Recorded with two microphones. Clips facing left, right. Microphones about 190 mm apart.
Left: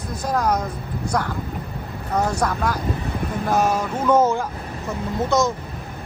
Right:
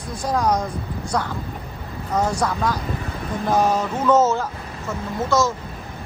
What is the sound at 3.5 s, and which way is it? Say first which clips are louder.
Speech: right 1 dB; 10° left (ahead or behind).